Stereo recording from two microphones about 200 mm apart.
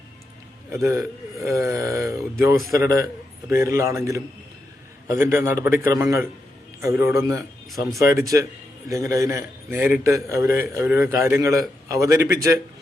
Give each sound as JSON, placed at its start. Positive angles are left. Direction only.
{"t": 0.7, "sound": "a man's voice", "side_deg": -15}